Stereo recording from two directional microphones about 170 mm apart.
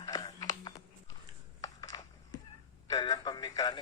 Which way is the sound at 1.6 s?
20° left (ahead or behind).